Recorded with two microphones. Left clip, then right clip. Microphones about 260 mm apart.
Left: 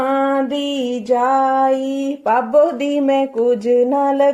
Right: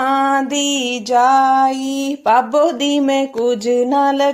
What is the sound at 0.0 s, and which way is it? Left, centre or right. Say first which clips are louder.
Music: right 2 dB; right.